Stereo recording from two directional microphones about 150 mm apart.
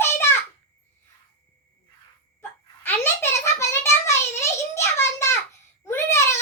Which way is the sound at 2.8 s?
15° left (ahead or behind).